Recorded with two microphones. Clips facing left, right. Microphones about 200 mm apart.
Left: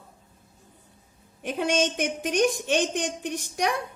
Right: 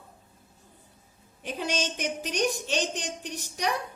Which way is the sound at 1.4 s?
55° left (ahead or behind).